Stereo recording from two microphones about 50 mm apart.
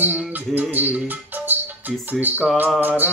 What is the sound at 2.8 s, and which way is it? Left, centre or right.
Speech, right.